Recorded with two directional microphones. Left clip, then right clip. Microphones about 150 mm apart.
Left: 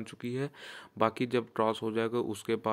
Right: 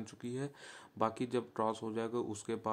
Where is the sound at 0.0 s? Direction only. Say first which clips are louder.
Left 6 dB; 20° left (ahead or behind).